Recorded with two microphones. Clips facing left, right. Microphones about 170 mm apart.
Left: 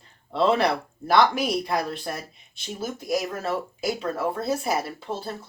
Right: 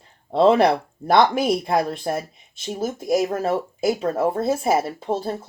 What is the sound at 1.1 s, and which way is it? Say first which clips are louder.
Speech: right 3 dB; 50° right (ahead or behind).